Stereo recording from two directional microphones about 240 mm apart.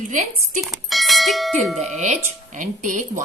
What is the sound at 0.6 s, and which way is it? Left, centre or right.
Speech, centre.